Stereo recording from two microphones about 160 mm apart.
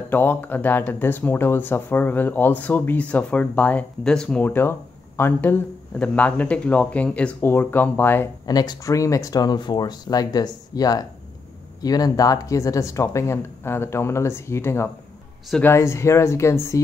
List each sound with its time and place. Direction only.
0.1 s speech: 10° left (ahead or behind)
8.5 s speech: 25° left (ahead or behind)